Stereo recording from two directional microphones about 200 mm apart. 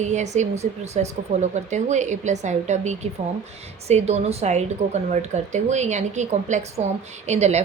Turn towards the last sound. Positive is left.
turn(degrees=-35)  # may be behind; listen again after turning